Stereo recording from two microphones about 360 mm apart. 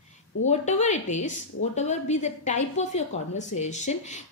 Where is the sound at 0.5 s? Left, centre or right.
Centre.